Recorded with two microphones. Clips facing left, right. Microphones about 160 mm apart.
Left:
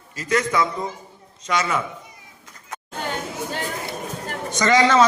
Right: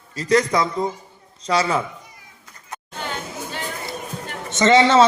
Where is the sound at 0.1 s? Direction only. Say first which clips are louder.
Right 4 dB; 35° right (ahead or behind).